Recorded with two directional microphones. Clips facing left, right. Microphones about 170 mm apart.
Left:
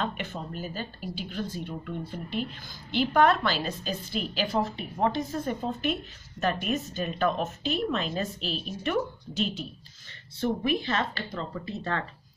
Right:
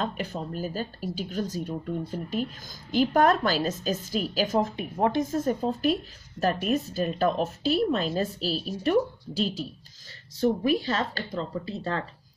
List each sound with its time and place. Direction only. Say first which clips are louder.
0.0 s speech: right 2 dB; 40° right (ahead or behind)